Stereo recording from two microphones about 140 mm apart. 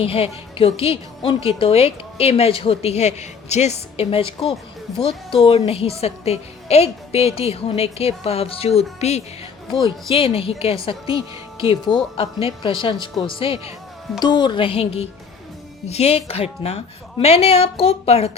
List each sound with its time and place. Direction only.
0.0 s a woman's voice: 40° left (ahead or behind)
9.7 s a woman's voice: 35° left (ahead or behind)